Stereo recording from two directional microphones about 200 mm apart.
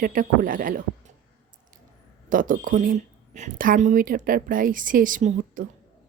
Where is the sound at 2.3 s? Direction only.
40° right (ahead or behind).